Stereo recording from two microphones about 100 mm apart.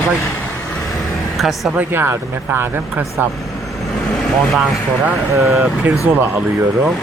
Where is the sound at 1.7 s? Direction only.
20° right (ahead or behind).